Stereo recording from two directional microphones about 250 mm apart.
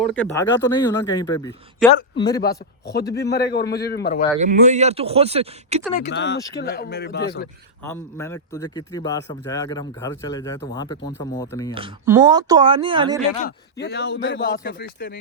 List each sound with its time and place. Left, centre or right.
0.0 s a man's voice: centre
2.8 s a man's voice: left
4.4 s speech: right
6.1 s a man's voice: left
7.9 s a man's voice: centre
12.0 s speech: centre
13.7 s a man's voice: left